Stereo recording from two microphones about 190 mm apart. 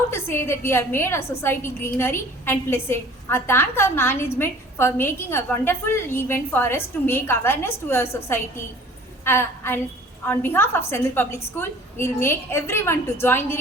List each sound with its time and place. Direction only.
0.1 s a woman's voice: 10° left (ahead or behind)